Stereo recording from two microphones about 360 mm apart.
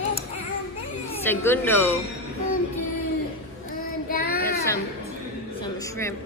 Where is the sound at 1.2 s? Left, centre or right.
Centre.